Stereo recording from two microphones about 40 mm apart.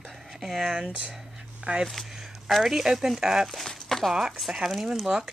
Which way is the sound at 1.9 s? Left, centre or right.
Centre.